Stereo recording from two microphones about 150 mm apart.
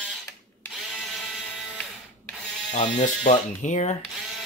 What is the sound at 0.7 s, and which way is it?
Drill, centre (ahead or behind).